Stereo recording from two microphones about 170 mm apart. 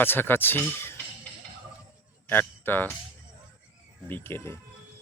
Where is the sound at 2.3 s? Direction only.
10° left (ahead or behind).